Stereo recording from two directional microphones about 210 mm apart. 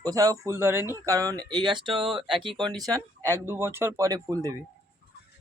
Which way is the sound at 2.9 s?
10° left (ahead or behind).